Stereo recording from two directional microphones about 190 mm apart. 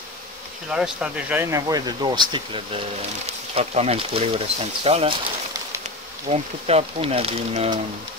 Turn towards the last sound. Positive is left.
turn(degrees=-30)  # may be behind; listen again after turning